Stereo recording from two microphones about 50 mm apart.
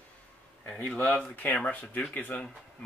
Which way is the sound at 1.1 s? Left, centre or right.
Left.